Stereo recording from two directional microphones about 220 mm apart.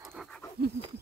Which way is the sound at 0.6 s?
45° right (ahead or behind).